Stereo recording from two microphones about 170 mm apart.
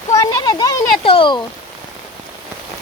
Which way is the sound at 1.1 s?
30° left (ahead or behind).